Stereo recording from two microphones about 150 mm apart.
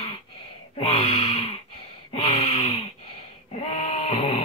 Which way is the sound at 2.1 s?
45° left (ahead or behind).